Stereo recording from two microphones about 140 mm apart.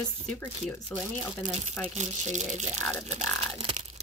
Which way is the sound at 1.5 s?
55° right (ahead or behind).